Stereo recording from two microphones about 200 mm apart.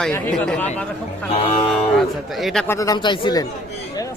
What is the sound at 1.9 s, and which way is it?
Speech, centre (ahead or behind).